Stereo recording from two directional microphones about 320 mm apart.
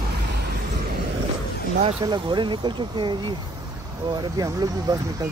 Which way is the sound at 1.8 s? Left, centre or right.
Centre.